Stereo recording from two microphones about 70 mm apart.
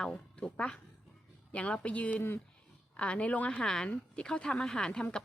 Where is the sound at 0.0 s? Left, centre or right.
Centre.